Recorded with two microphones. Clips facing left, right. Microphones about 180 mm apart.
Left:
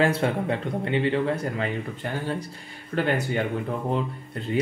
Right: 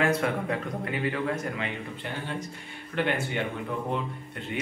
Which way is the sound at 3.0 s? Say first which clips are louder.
Left 4 dB; 40° left (ahead or behind).